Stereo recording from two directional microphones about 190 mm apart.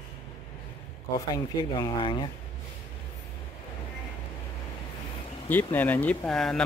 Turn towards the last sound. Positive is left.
turn(degrees=5)  # may be behind; listen again after turning